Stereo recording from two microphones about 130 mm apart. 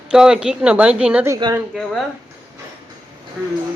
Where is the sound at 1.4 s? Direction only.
40° right (ahead or behind).